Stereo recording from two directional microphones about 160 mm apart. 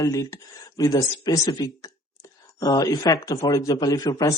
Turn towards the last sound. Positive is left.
turn(degrees=25)  # may be behind; listen again after turning